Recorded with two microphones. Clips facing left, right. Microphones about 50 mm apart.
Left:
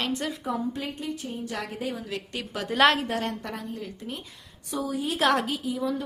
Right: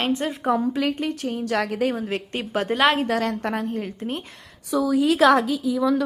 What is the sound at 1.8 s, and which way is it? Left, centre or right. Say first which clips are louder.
Speech: right 7 dB; right.